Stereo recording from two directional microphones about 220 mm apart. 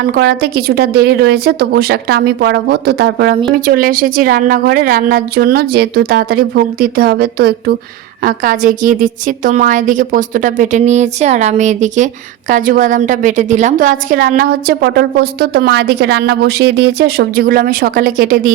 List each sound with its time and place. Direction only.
0.1 s a woman's voice: 45° right (ahead or behind)